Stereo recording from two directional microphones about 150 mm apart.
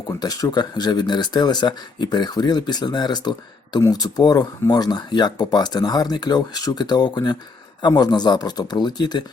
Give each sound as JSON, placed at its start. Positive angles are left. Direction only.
{"t": 0.1, "sound": "speech", "side_deg": 25}